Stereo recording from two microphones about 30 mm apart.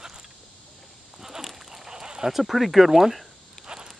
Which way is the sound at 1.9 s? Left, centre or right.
Right.